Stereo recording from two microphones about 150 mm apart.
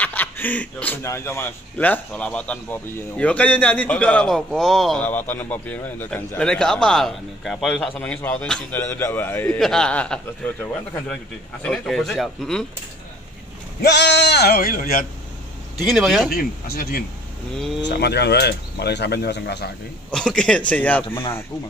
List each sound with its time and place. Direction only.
0.0 s a man's voice: 10° left (ahead or behind)
5.0 s a man's voice: 10° left (ahead or behind)
9.6 s a man's voice: 5° left (ahead or behind)
13.7 s speech: 90° left; by 15.0 s 65° left (ahead or behind)
15.8 s a man's voice: centre (ahead or behind)
16.3 s speech: 75° left (ahead or behind)
17.6 s a man's voice: centre (ahead or behind)
17.9 s speech: 90° left
20.1 s a man's voice: 5° left (ahead or behind)